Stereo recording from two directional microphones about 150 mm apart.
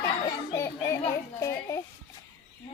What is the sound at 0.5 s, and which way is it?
Children playing, 20° left (ahead or behind).